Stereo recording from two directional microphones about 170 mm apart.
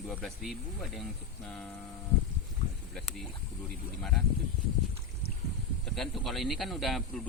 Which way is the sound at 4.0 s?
Centre (ahead or behind).